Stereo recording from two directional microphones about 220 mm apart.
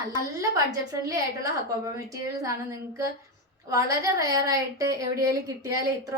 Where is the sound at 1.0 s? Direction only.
15° right (ahead or behind).